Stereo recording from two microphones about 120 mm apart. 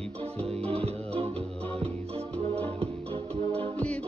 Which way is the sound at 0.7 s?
55° right (ahead or behind).